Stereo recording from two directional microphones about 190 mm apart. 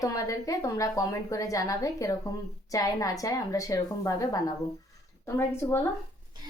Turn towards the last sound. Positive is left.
turn(degrees=15)  # may be behind; listen again after turning